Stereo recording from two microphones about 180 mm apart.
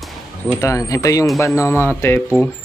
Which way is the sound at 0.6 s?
15° left (ahead or behind).